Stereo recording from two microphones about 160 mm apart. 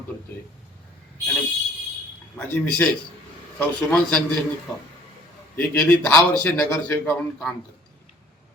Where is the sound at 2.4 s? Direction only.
10° left (ahead or behind).